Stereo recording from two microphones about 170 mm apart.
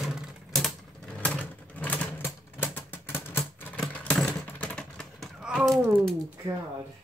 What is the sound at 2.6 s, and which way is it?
Typewriter, 10° left (ahead or behind).